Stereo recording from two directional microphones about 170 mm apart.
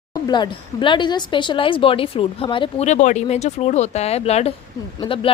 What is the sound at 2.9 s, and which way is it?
Speech, 45° left (ahead or behind).